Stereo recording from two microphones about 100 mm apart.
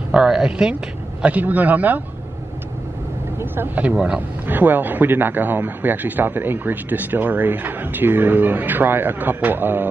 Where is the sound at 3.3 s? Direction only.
20° right (ahead or behind).